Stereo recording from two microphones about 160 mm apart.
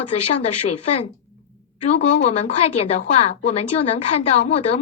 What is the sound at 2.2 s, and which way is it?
A woman's voice, 40° left (ahead or behind).